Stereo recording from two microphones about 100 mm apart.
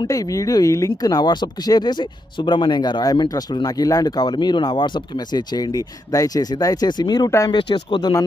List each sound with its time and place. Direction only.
0.0 s speech: 35° left (ahead or behind)
7.2 s speech: 30° left (ahead or behind)
7.5 s speech: 50° left (ahead or behind)